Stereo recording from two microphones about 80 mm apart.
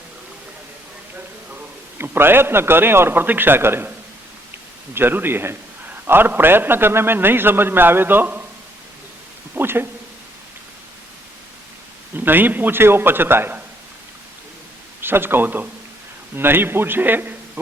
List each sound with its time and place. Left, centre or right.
2.0 s a man's voice: right
4.9 s a man's voice: right
9.6 s a man's voice: right
12.1 s a man's voice: right
15.0 s a man's voice: right